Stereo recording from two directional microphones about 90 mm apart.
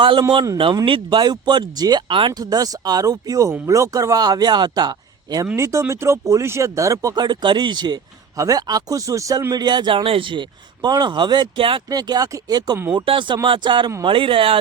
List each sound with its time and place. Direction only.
0.0 s speech: 65° right (ahead or behind)
2.4 s speech: 45° right (ahead or behind)
5.5 s speech: 35° right (ahead or behind); by 7.9 s 55° right (ahead or behind)
8.4 s speech: 40° right (ahead or behind); by 10.4 s 75° right (ahead or behind)
10.8 s speech: 50° right (ahead or behind); by 11.8 s 70° right (ahead or behind)
11.9 s speech: 45° right (ahead or behind)
13.1 s speech: 65° right (ahead or behind)
14.0 s speech: 75° right (ahead or behind)